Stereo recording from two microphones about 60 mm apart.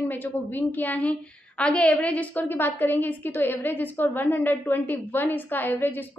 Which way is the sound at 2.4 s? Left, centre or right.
Left.